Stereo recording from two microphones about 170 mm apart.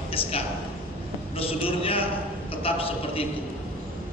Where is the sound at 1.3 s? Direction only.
35° left (ahead or behind).